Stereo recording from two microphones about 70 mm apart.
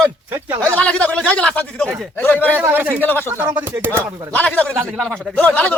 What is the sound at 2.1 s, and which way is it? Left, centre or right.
Speech, left.